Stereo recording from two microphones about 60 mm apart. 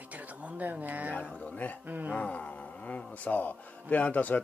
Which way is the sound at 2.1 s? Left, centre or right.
Left.